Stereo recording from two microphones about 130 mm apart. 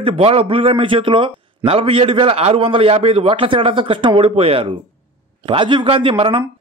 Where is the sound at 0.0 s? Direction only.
45° right (ahead or behind).